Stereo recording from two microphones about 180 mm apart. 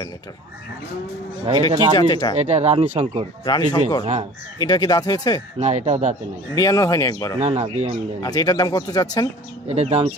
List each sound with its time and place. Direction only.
1.7 s speech: 25° right (ahead or behind)
2.0 s speech: 20° left (ahead or behind)
2.3 s speech: 35° right (ahead or behind)
3.4 s speech: 25° left (ahead or behind)
4.0 s speech: 35° right (ahead or behind)
4.6 s speech: 20° left (ahead or behind)
5.6 s speech: 40° right (ahead or behind)
6.5 s speech: 20° left (ahead or behind)
7.3 s speech: 35° right (ahead or behind)
8.2 s speech: 20° left (ahead or behind)
9.7 s speech: 35° right (ahead or behind)